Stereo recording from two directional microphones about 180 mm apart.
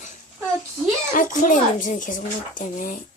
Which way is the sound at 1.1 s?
45° left (ahead or behind).